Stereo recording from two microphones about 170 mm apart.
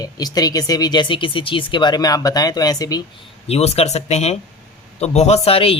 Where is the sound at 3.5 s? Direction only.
35° left (ahead or behind).